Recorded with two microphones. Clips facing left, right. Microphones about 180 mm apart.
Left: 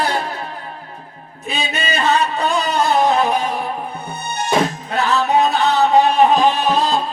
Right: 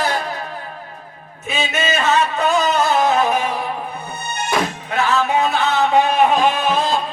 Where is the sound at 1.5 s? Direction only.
35° left (ahead or behind).